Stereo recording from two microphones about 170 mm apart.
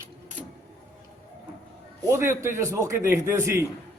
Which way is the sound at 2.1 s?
15° right (ahead or behind).